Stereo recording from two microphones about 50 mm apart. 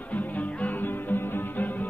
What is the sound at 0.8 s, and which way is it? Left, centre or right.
Music, left.